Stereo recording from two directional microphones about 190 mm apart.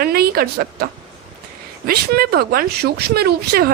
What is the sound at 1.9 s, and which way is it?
A woman's voice, 55° right (ahead or behind).